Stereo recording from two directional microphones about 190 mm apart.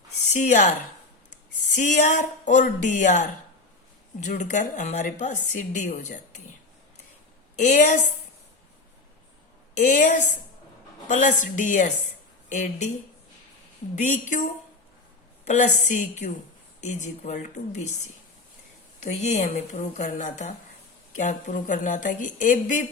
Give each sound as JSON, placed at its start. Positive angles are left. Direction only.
{"t": 0.3, "sound": "a woman's voice", "side_deg": 40}
{"t": 1.7, "sound": "a woman's voice", "side_deg": 40}
{"t": 7.5, "sound": "a woman's voice", "side_deg": 40}
{"t": 9.8, "sound": "a woman's voice", "side_deg": 40}
{"t": 13.9, "sound": "a woman's voice", "side_deg": 40}
{"t": 19.0, "sound": "a woman's voice", "side_deg": 35}